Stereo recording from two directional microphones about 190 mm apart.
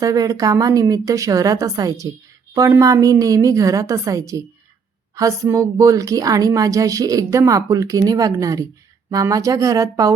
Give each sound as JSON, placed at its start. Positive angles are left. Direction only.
{"t": 0.0, "sound": "a woman's voice", "side_deg": -20}